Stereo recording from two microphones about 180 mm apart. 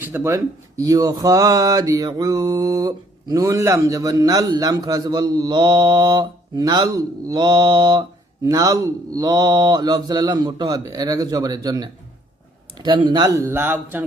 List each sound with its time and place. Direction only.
0.0 s speech: 15° right (ahead or behind)